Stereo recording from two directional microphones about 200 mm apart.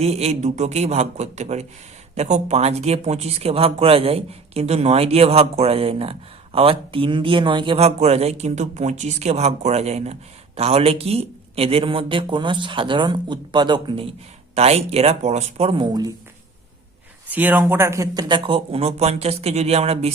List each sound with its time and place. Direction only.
0.0 s a man's voice: 30° right (ahead or behind)
17.2 s a man's voice: 10° right (ahead or behind); by 20.1 s 30° right (ahead or behind)